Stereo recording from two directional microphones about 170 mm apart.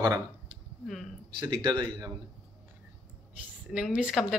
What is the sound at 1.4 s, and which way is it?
Speech, 25° right (ahead or behind).